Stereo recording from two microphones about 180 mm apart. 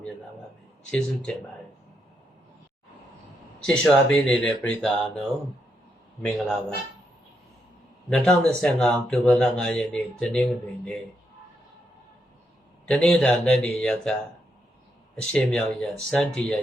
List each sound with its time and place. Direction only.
0.9 s speech: 5° left (ahead or behind)
3.6 s speech: 5° left (ahead or behind)
6.2 s speech: centre (ahead or behind)
8.1 s speech: 5° left (ahead or behind)
12.9 s speech: 5° left (ahead or behind)